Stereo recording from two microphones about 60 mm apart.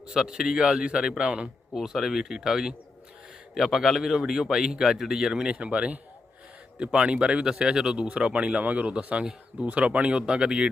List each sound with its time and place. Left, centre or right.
0.1 s a man's voice: centre